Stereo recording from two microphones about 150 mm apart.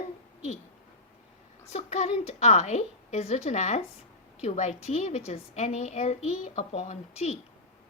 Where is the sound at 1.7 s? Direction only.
45° left (ahead or behind).